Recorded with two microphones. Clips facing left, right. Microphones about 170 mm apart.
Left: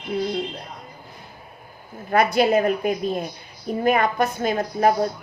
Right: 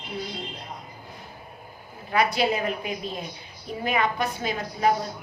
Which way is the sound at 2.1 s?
50° left (ahead or behind).